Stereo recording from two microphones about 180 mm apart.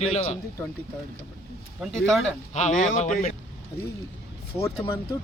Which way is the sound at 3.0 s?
40° left (ahead or behind).